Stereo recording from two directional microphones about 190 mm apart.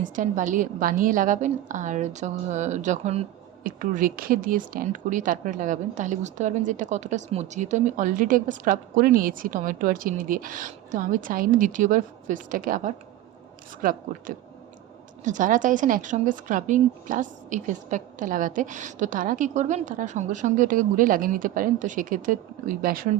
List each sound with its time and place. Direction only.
0.0 s speech: 45° right (ahead or behind)
3.6 s speech: 45° right (ahead or behind)